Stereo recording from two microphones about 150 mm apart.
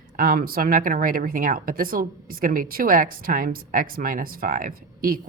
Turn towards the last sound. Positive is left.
turn(degrees=-70)  # may be behind; listen again after turning